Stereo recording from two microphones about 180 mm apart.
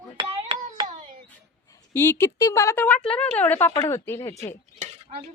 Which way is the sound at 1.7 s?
15° left (ahead or behind).